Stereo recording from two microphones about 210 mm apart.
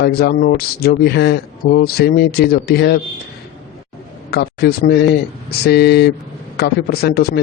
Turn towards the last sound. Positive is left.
turn(degrees=50)  # may be behind; listen again after turning